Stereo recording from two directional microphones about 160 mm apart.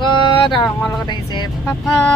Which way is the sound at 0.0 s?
30° left (ahead or behind).